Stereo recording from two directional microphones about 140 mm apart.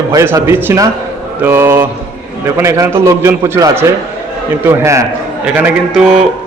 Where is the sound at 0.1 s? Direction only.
25° right (ahead or behind).